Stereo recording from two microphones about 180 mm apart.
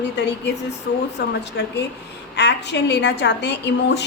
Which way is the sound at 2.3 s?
70° left (ahead or behind).